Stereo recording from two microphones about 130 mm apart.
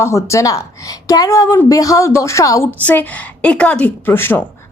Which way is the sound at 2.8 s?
15° left (ahead or behind).